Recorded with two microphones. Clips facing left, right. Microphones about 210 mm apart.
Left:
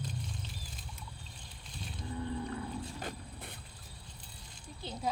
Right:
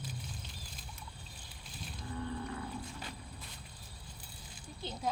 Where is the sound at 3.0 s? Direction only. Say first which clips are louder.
Left 4 dB; 55° left (ahead or behind).